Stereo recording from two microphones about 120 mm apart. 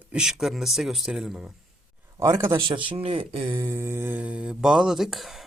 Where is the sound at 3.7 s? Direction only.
20° right (ahead or behind); by 5.4 s centre (ahead or behind).